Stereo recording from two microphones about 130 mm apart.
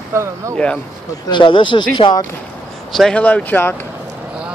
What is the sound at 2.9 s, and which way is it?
Speech, centre (ahead or behind).